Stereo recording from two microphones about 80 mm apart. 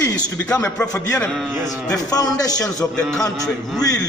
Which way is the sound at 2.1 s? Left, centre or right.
Left.